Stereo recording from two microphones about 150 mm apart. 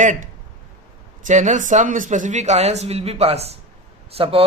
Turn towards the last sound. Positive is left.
turn(degrees=-40)  # may be behind; listen again after turning